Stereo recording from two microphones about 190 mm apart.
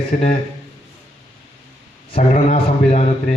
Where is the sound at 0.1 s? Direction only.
35° left (ahead or behind).